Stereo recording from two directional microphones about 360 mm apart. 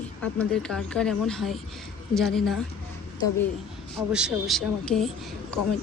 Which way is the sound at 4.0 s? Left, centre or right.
Centre.